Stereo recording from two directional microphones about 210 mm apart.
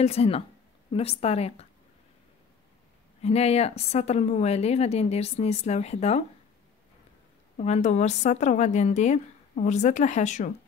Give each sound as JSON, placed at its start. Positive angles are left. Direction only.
{"t": 0.0, "sound": "a woman's voice", "side_deg": 30}
{"t": 3.2, "sound": "speech", "side_deg": 30}
{"t": 7.5, "sound": "speech", "side_deg": 30}